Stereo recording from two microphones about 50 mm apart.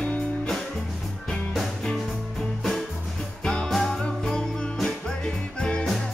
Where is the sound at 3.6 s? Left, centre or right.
Centre.